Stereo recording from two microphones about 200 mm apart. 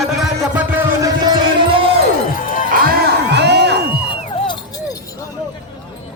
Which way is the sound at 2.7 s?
50° right (ahead or behind).